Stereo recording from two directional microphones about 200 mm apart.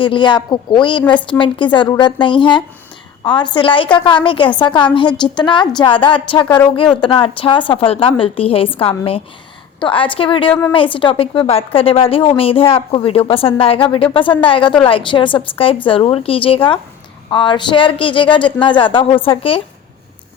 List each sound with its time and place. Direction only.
0.0 s a woman's voice: 25° left (ahead or behind)